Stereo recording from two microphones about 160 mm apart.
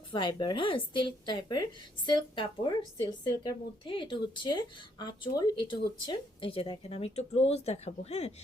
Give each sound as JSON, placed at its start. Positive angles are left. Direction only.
{"t": 0.1, "sound": "speech", "side_deg": 30}